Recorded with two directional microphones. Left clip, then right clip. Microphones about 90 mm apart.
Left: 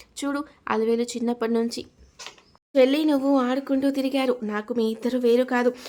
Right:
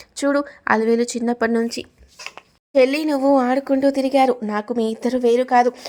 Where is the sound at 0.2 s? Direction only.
45° right (ahead or behind).